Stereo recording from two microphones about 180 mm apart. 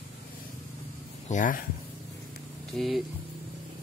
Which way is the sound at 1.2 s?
45° left (ahead or behind).